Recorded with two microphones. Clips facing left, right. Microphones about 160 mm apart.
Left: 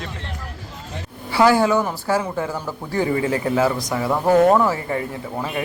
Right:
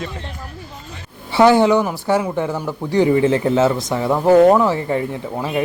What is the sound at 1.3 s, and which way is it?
Speech, 25° right (ahead or behind).